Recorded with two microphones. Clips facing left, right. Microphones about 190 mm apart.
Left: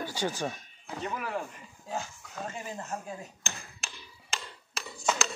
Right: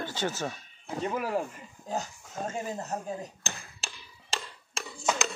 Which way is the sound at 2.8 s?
40° right (ahead or behind).